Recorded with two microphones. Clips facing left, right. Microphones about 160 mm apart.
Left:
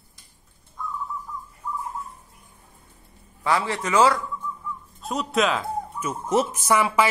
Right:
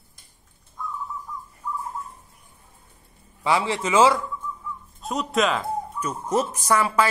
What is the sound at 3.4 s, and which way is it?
Speech, 20° right (ahead or behind).